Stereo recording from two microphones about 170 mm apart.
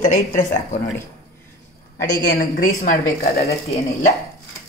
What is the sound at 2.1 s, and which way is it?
A woman's voice, 55° left (ahead or behind).